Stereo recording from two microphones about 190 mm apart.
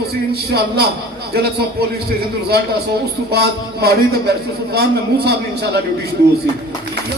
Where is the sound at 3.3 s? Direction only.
55° right (ahead or behind).